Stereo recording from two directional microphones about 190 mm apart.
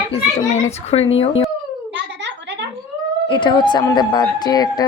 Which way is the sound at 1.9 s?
70° right (ahead or behind).